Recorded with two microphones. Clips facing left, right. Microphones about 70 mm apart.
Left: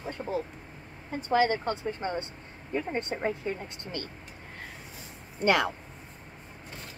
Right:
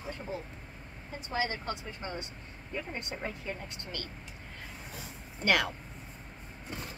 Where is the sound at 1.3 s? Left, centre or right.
Left.